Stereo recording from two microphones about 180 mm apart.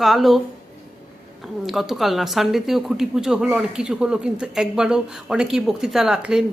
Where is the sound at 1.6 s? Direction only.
Centre (ahead or behind).